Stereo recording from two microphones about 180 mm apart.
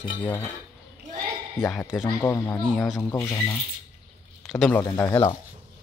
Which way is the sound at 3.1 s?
15° left (ahead or behind).